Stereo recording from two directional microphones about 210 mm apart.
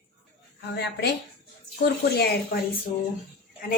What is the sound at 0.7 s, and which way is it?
A woman's voice, 55° left (ahead or behind).